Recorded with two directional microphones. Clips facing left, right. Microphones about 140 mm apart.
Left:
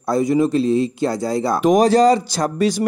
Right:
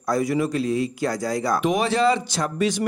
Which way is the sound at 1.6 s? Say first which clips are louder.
Left 10 dB; 40° left (ahead or behind).